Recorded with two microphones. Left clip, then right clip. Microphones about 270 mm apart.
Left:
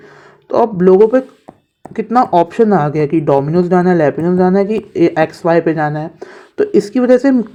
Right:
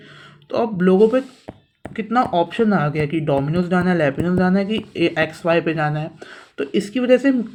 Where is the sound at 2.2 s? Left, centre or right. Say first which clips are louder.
Left 7 dB; left.